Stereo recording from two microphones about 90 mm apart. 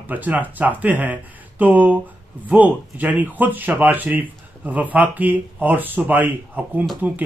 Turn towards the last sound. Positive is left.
turn(degrees=-20)  # may be behind; listen again after turning